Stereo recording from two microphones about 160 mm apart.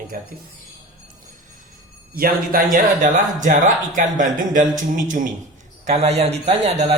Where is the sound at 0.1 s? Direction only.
65° right (ahead or behind).